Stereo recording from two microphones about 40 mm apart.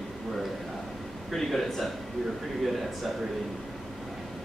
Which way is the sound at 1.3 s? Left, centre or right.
Centre.